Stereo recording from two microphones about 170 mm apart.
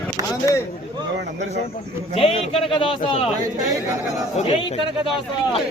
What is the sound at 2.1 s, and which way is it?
A man's voice, 35° left (ahead or behind).